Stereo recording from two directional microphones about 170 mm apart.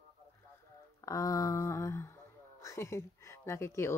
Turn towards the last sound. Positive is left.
turn(degrees=15)  # may be behind; listen again after turning